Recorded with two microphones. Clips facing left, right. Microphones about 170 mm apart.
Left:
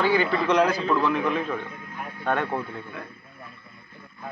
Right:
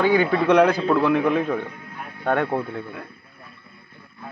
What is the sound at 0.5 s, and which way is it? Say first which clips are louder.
A man's voice: right 6 dB; 60° right (ahead or behind).